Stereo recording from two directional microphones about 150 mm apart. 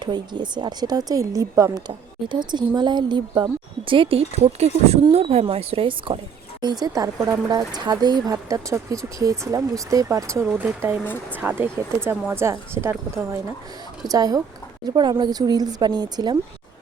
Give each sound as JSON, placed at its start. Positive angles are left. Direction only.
{"t": 0.0, "sound": "speech", "side_deg": -30}
{"t": 6.6, "sound": "a woman's voice", "side_deg": -25}